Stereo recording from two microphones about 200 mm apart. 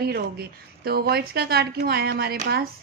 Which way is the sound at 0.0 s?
50° right (ahead or behind).